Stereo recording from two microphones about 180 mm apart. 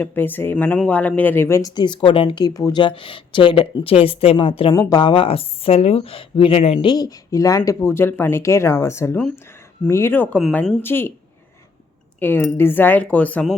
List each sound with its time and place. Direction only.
0.0 s speech: 10° left (ahead or behind); by 4.7 s 30° left (ahead or behind)
4.7 s speech: 20° left (ahead or behind)
12.2 s speech: 10° left (ahead or behind)